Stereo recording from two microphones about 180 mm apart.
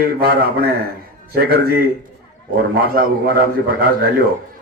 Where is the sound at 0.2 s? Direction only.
55° right (ahead or behind).